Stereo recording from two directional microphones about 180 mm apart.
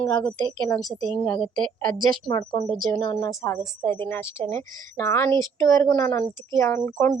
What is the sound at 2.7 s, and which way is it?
Speech, 50° right (ahead or behind).